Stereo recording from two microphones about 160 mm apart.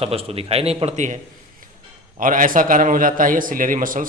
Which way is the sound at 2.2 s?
55° right (ahead or behind).